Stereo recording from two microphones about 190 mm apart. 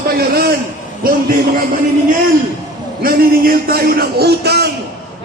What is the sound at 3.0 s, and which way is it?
A man's voice, 50° right (ahead or behind).